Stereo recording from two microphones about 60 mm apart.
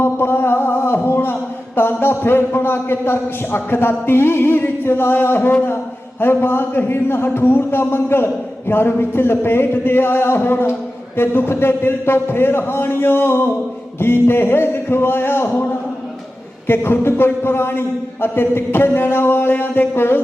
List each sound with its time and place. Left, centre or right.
0.0 s a sound: left
11.2 s a man's voice: left
16.6 s a man's voice: left